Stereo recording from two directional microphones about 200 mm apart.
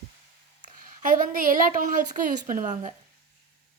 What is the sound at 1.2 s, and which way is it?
A woman's voice, 45° right (ahead or behind).